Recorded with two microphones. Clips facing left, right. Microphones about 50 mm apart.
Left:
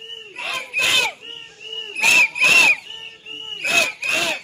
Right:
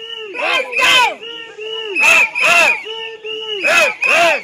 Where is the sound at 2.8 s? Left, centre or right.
Right.